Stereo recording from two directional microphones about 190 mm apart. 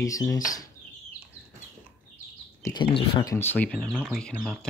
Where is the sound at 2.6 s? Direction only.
25° left (ahead or behind).